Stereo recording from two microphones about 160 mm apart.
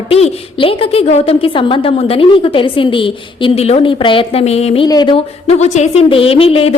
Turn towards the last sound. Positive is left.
turn(degrees=35)  # may be behind; listen again after turning